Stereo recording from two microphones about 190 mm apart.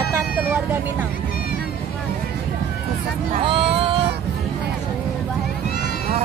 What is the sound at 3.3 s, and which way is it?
Vehicle, 30° right (ahead or behind).